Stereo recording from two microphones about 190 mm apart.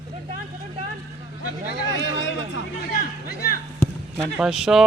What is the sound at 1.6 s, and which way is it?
Speech, 75° left (ahead or behind).